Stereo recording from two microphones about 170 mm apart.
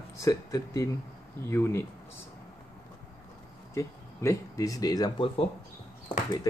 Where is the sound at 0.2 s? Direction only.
20° left (ahead or behind).